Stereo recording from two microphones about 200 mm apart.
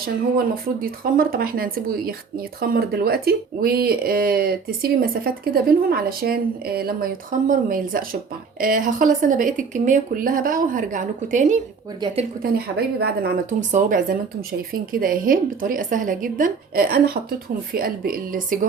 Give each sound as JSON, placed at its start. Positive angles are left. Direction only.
{"t": 0.8, "sound": "speech", "side_deg": -45}
{"t": 12.4, "sound": "speech", "side_deg": -55}
{"t": 13.7, "sound": "speech", "side_deg": -40}